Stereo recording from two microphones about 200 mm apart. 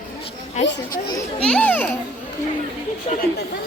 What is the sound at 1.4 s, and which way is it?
Speech, 5° left (ahead or behind).